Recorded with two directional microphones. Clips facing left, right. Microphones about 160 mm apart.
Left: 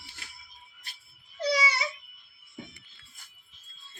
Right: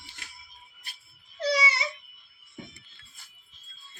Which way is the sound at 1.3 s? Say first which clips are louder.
Right 1 dB; centre (ahead or behind).